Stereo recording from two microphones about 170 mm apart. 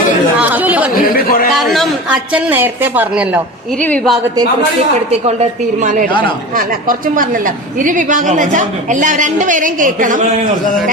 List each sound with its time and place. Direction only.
0.3 s chatter: 10° right (ahead or behind)
1.1 s a man's voice: 60° left (ahead or behind)
1.5 s a woman's voice: centre (ahead or behind)
3.8 s speech: 10° left (ahead or behind)
5.8 s speech: 50° right (ahead or behind)